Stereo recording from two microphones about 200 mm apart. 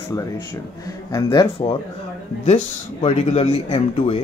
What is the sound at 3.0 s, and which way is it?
Speech, 30° left (ahead or behind).